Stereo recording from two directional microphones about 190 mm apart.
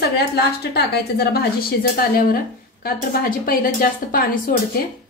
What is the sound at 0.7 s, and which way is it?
Speech, 55° left (ahead or behind).